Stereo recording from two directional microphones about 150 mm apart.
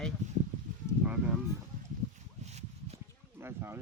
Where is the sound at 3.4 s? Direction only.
15° right (ahead or behind).